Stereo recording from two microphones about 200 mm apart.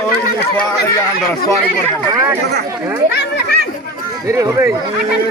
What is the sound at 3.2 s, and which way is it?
Children playing, 55° left (ahead or behind).